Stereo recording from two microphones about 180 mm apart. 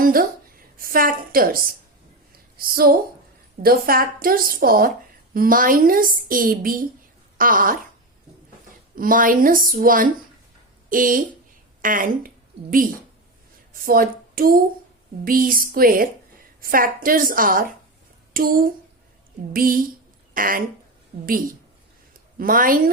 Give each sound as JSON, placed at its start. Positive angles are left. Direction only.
{"t": 0.0, "sound": "a woman's voice", "side_deg": -55}
{"t": 2.3, "sound": "a sound", "side_deg": -55}
{"t": 3.6, "sound": "a woman's voice", "side_deg": -55}
{"t": 9.0, "sound": "a woman's voice", "side_deg": -50}
{"t": 13.7, "sound": "a woman's voice", "side_deg": -55}
{"t": 22.4, "sound": "a woman's voice", "side_deg": -50}